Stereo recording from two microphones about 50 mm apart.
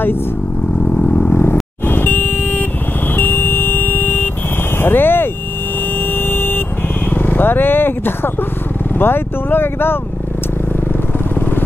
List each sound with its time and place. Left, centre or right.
0.8 s vehicle: left
1.3 s vehicle: left
8.9 s speech: left